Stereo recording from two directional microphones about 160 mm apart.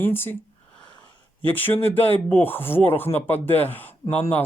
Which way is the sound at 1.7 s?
35° left (ahead or behind).